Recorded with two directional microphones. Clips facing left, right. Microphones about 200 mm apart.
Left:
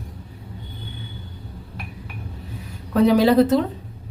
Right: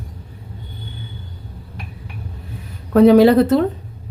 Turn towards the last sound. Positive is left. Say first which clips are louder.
# right 4 dB
turn(degrees=-55)  # may be behind; listen again after turning